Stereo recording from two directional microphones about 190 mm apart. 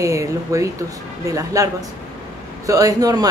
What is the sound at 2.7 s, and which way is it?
Speech, 20° right (ahead or behind).